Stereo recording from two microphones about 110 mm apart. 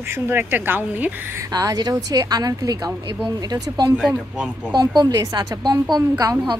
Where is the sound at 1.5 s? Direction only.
35° right (ahead or behind).